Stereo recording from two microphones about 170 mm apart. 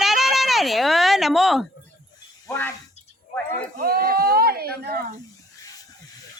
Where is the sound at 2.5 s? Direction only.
15° left (ahead or behind).